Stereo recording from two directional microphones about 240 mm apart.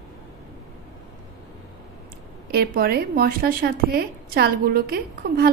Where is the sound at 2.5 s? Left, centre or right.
Right.